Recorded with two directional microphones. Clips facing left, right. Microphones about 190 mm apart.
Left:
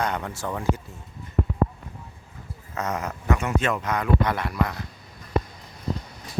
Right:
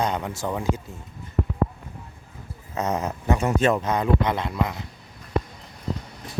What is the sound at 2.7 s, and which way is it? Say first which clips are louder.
Speech: right 3 dB; 25° right (ahead or behind).